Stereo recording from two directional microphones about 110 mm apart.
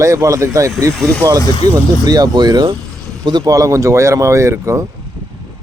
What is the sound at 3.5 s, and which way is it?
Speech, 30° right (ahead or behind).